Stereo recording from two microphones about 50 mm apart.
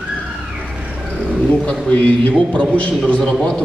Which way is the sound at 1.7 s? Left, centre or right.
Left.